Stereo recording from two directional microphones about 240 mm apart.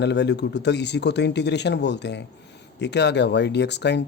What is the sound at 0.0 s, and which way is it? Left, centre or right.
Speech, left.